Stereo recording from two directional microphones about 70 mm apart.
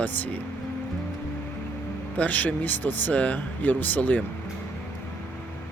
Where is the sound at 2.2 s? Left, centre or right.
Left.